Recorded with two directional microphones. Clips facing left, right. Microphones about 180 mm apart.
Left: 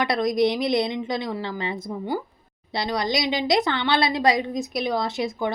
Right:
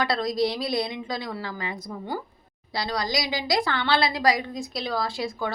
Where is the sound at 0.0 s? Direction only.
20° left (ahead or behind).